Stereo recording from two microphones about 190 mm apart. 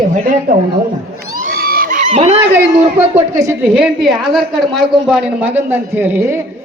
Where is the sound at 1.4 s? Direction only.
50° right (ahead or behind).